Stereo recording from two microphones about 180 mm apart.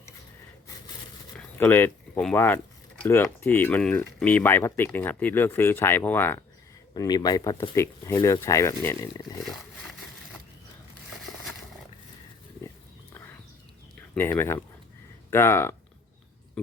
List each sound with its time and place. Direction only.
1.4 s speech: 10° left (ahead or behind)
6.9 s speech: 20° left (ahead or behind)
14.2 s speech: 15° left (ahead or behind)